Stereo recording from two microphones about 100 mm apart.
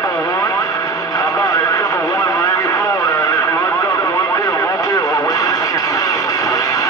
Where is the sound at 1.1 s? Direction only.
40° left (ahead or behind).